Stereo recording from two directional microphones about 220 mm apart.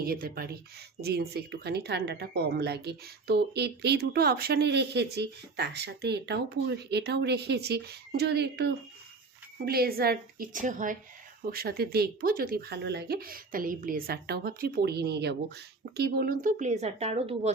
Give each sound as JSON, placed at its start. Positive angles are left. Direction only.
{"t": 0.0, "sound": "a woman's voice", "side_deg": -40}